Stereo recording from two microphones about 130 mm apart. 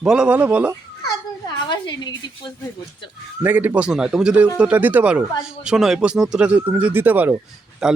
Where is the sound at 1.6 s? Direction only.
35° left (ahead or behind).